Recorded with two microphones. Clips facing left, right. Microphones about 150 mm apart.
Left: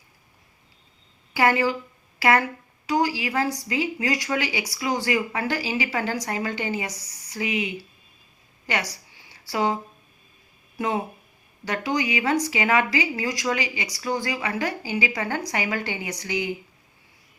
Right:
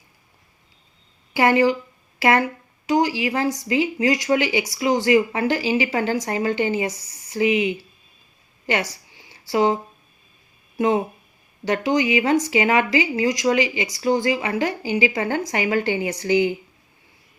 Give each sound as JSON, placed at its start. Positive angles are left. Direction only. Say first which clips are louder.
{"t": 1.3, "sound": "speech", "louder": "right 4 dB", "side_deg": -20}
{"t": 8.6, "sound": "a sound", "louder": "right 5 dB", "side_deg": -25}
{"t": 10.8, "sound": "speech", "louder": "right 6 dB", "side_deg": -20}